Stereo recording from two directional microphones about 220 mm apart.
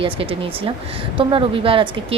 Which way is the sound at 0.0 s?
25° right (ahead or behind).